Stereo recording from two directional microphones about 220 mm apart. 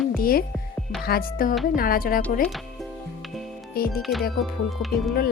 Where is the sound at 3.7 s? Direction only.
45° left (ahead or behind).